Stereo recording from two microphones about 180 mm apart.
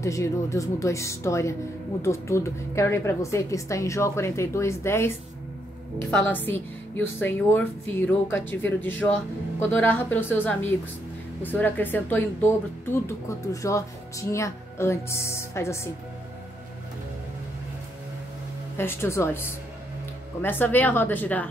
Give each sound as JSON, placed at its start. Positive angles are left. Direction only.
{"t": 0.0, "sound": "speech", "side_deg": 15}
{"t": 18.8, "sound": "speech", "side_deg": 15}